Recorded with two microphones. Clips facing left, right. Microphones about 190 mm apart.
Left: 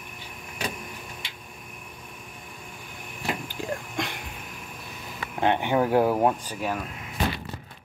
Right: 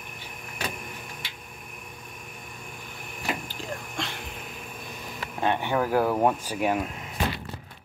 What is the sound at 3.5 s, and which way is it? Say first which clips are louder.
Vehicle: left 4 dB; 15° left (ahead or behind).